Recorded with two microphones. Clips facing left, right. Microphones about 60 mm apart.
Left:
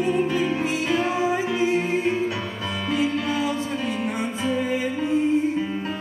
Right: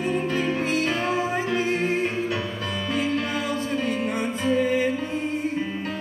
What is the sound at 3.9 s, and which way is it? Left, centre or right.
Music, right.